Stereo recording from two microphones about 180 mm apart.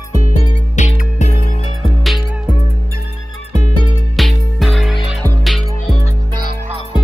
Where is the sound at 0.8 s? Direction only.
40° left (ahead or behind).